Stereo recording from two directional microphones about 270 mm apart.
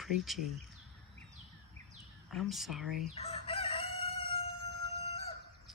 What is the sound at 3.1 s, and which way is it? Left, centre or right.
Chicken, left.